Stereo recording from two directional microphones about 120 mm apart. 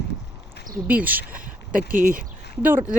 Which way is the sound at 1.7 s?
90° right.